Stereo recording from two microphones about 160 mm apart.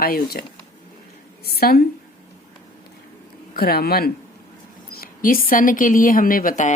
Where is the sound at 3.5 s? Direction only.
75° left (ahead or behind).